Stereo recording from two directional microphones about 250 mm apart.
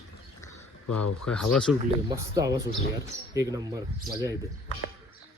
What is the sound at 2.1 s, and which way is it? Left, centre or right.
Speech, centre.